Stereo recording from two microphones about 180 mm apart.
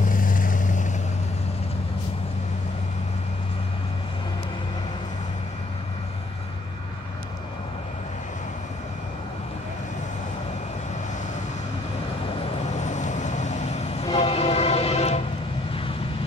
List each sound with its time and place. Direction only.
0.0 s vehicle: 50° left (ahead or behind)
12.4 s vehicle: 40° left (ahead or behind)
14.1 s train: 35° left (ahead or behind)